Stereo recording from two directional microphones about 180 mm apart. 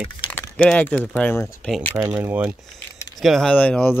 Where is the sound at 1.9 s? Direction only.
10° right (ahead or behind).